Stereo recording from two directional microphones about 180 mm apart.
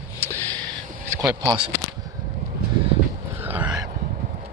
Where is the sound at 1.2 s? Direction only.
20° right (ahead or behind).